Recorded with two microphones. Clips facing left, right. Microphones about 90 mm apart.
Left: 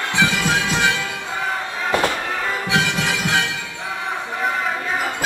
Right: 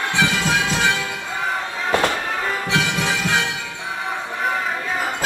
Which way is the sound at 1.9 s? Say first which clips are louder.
Even; 20° left (ahead or behind).